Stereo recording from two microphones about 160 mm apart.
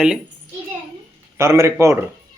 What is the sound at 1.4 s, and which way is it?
Speech, 15° right (ahead or behind).